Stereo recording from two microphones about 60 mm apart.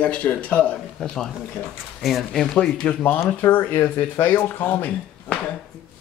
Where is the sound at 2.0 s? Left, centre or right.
Centre.